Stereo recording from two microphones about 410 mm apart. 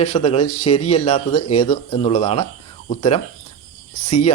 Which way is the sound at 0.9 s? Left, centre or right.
Centre.